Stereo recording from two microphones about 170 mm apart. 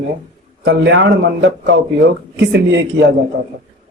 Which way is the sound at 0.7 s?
90° right.